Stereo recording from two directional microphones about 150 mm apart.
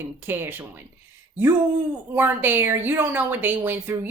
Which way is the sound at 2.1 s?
15° right (ahead or behind).